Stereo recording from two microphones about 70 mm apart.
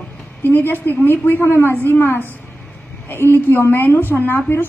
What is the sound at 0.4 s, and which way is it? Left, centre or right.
A woman's voice, left.